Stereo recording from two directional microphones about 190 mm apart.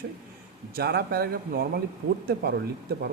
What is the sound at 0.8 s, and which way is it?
Speech, 55° right (ahead or behind).